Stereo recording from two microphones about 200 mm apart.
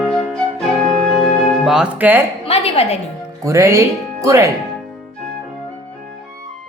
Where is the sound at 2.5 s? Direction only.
30° left (ahead or behind).